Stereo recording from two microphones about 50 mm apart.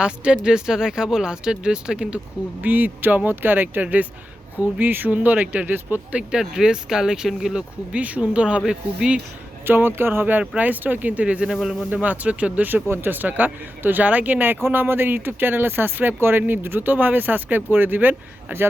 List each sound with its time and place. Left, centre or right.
0.0 s speech: centre; by 6.1 s right
6.4 s speech: centre
7.5 s speech: right
9.6 s speech: right
10.4 s speech: right